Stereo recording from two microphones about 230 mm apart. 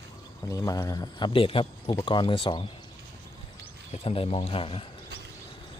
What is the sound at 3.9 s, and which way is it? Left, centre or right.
Speech, left.